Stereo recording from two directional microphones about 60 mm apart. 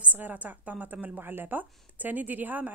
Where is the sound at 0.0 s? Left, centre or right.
Right.